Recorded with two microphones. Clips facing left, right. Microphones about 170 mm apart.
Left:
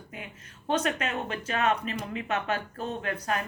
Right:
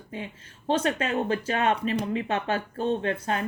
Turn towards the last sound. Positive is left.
turn(degrees=-25)  # may be behind; listen again after turning